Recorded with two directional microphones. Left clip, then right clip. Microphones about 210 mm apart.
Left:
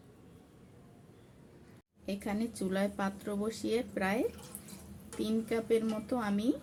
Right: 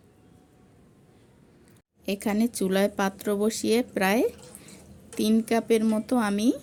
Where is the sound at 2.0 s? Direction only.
50° right (ahead or behind).